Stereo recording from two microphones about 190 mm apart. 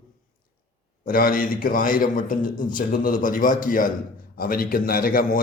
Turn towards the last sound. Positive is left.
turn(degrees=50)  # may be behind; listen again after turning